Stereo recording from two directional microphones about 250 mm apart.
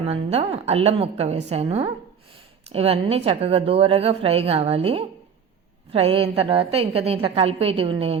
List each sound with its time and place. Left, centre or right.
0.1 s a woman's voice: right